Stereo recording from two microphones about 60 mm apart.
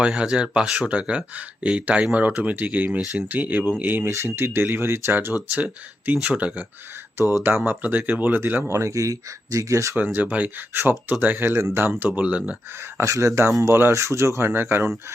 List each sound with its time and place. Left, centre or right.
0.2 s speech: centre
0.9 s speech: right
4.0 s speech: right; by 6.7 s centre
7.4 s speech: right
8.7 s speech: right
9.9 s speech: right
12.0 s speech: right
13.0 s speech: right